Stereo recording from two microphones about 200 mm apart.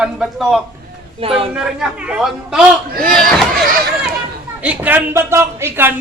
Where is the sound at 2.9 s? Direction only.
45° right (ahead or behind).